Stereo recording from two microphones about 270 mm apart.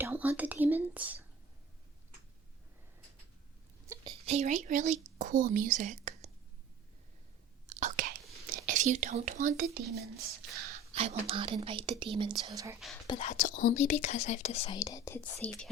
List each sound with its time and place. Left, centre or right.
0.0 s speech: centre
3.8 s speech: centre
7.7 s chewing: right
8.6 s speech: right
10.9 s speech: right
13.1 s speech: left; by 15.7 s centre